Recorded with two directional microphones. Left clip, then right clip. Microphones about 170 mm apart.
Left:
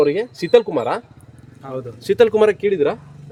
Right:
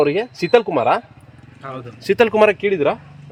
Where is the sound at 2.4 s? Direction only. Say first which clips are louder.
Right 1 dB; 30° right (ahead or behind).